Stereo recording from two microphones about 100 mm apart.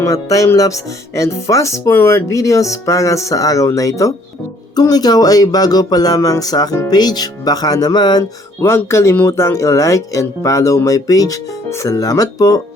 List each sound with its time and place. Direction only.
0.0 s speech: 35° left (ahead or behind)
8.2 s speech: 25° left (ahead or behind)